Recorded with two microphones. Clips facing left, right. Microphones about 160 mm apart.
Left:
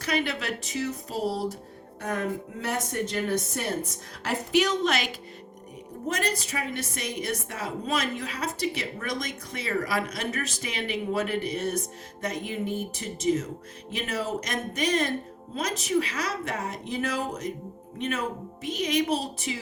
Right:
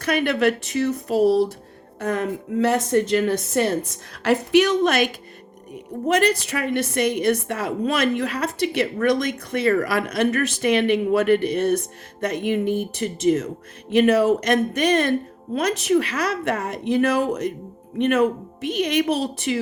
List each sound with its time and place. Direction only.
0.0 s a woman's voice: 60° right (ahead or behind)
2.0 s a woman's voice: 90° right; by 5.1 s 50° right (ahead or behind)
6.1 s a woman's voice: 70° right (ahead or behind)